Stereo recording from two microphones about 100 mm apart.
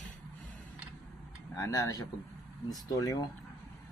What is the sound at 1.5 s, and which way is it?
Speech, 35° left (ahead or behind).